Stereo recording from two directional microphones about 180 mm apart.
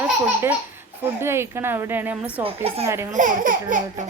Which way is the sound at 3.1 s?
45° right (ahead or behind).